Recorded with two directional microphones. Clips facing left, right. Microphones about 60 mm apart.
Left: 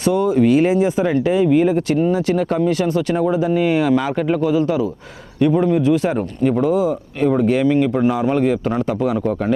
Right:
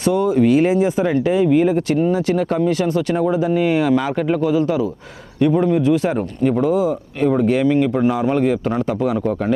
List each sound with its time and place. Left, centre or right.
0.0 s speech: left